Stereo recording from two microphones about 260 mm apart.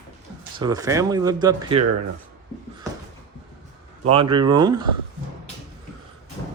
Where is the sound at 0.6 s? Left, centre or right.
Centre.